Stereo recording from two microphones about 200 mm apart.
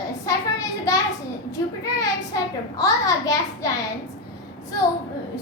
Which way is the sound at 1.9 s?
15° left (ahead or behind).